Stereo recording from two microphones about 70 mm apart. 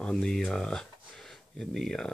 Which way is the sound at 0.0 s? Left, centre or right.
Centre.